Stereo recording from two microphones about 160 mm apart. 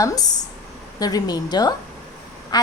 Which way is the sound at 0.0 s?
25° left (ahead or behind).